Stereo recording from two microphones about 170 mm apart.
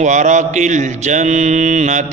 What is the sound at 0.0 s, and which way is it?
A man's voice, 45° right (ahead or behind).